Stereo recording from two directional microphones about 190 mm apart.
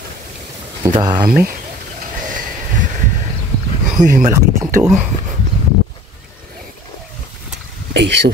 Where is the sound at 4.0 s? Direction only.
45° right (ahead or behind).